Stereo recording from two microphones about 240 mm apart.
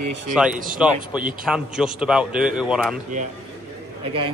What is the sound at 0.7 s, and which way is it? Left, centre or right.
A man's voice, centre.